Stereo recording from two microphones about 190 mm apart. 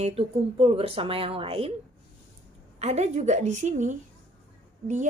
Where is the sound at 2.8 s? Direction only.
35° right (ahead or behind).